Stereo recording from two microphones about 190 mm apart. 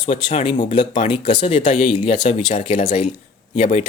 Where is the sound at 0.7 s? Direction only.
25° left (ahead or behind).